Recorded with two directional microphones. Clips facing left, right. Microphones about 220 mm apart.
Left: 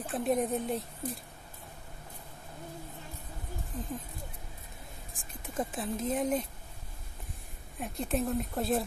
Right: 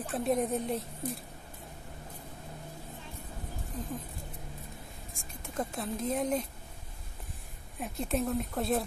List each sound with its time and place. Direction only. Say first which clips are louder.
0.0 s speech: even; centre (ahead or behind)
3.7 s speech: even; centre (ahead or behind)
5.5 s speech: left 1 dB; 5° left (ahead or behind)
7.8 s speech: even; centre (ahead or behind)